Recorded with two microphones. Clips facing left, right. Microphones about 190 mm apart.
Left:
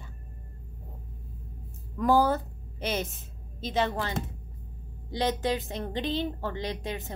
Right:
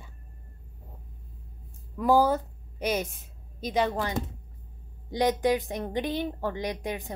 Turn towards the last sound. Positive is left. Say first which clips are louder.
# right 2 dB
turn(degrees=-15)  # may be behind; listen again after turning